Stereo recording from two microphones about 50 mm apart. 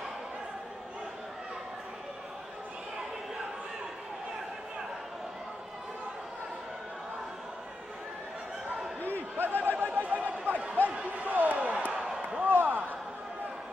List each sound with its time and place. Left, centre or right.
9.4 s chatter: right
10.9 s a sound: right
12.4 s basketball bounce: right